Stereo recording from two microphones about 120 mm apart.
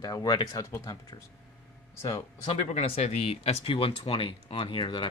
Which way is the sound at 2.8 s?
60° left (ahead or behind).